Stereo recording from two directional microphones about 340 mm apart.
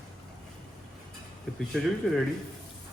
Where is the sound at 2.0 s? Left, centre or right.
Centre.